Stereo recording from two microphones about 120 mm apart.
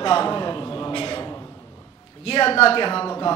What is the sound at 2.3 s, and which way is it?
Speech, 50° left (ahead or behind).